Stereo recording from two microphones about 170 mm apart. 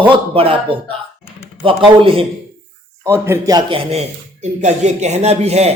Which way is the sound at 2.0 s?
30° right (ahead or behind).